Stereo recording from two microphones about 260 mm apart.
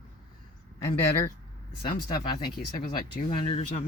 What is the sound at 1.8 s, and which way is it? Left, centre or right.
Speech, centre.